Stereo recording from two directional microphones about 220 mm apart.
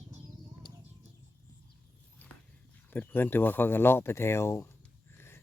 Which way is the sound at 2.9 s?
10° left (ahead or behind).